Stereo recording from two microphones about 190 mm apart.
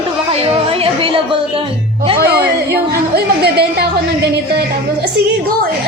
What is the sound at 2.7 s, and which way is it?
Speech, 55° right (ahead or behind).